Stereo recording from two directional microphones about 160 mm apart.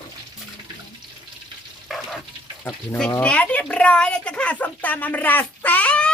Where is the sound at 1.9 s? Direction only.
Centre (ahead or behind).